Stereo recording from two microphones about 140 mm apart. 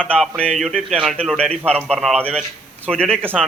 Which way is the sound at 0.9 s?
5° right (ahead or behind).